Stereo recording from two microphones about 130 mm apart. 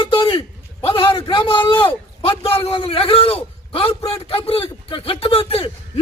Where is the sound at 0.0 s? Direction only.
40° left (ahead or behind).